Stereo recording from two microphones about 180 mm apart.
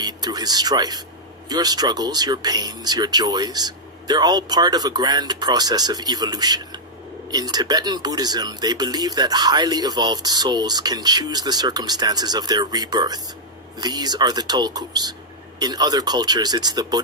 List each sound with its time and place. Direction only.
0.0 s speech: 20° right (ahead or behind)